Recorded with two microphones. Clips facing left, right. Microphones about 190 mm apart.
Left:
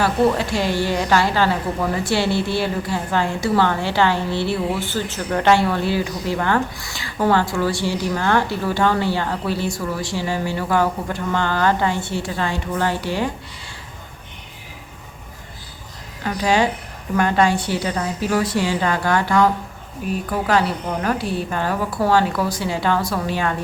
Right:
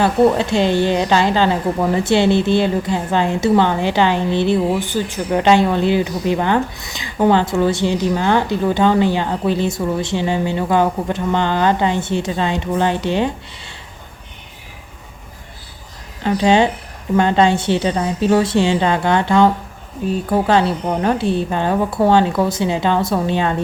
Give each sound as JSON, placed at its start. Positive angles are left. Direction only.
{"t": 0.0, "sound": "a woman's voice", "side_deg": -25}
{"t": 16.2, "sound": "a woman's voice", "side_deg": -25}